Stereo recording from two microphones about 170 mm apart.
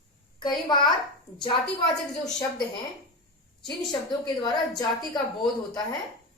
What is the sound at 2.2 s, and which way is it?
Speech, 20° left (ahead or behind).